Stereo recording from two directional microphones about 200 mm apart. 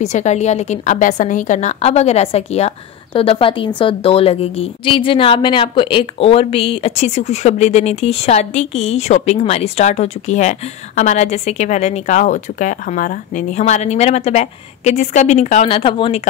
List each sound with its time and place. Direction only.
0.0 s a woman's voice: 35° left (ahead or behind)